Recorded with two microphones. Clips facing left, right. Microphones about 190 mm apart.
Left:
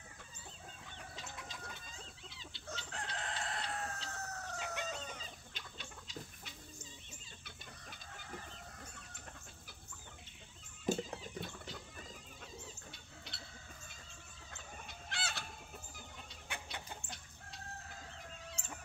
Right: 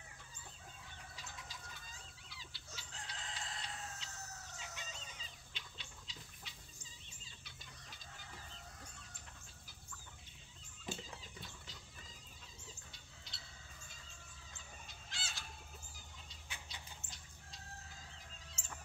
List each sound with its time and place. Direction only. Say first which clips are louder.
1.2 s bird: left 5 dB; 60° left (ahead or behind)
2.2 s chicken: left 5 dB; 25° left (ahead or behind)
2.7 s chicken: left 9 dB; 65° left (ahead or behind)
10.9 s cat: left 11 dB; 55° left (ahead or behind)
12.6 s a sound: left 5 dB; 60° left (ahead or behind)
14.5 s chicken: left 7 dB; 60° left (ahead or behind)